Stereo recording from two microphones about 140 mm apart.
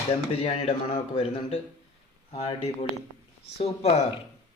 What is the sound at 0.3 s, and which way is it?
Speech, 50° left (ahead or behind).